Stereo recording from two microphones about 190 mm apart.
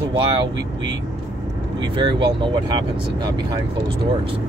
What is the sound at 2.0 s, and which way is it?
Speech, 25° right (ahead or behind).